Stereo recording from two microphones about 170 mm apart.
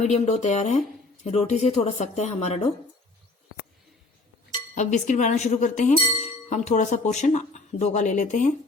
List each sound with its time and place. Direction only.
0.0 s speech: 40° left (ahead or behind)
4.7 s speech: 45° left (ahead or behind)